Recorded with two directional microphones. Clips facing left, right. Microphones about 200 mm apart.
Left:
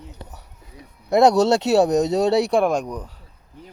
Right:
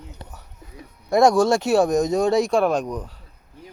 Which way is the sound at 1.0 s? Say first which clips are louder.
Left 1 dB; 20° left (ahead or behind).